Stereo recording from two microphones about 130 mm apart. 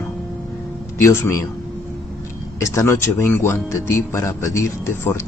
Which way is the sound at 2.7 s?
25° left (ahead or behind).